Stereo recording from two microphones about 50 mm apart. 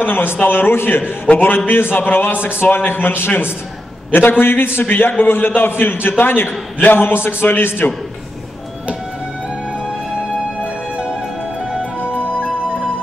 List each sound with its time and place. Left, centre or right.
0.0 s a man's voice: left
1.2 s a man's voice: left
1.7 s a man's voice: left